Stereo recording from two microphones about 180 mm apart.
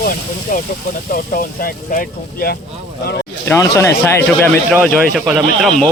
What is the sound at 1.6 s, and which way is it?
Speech, 55° left (ahead or behind).